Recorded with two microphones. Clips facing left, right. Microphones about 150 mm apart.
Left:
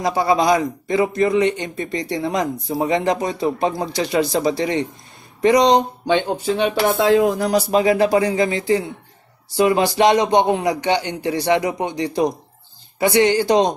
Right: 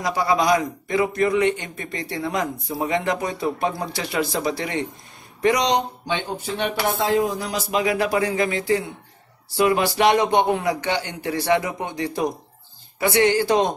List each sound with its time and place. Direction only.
0.0 s a man's voice: 25° left (ahead or behind)
7.0 s music: 85° left
7.3 s speech: 45° left (ahead or behind)
7.7 s a man's voice: 30° left (ahead or behind)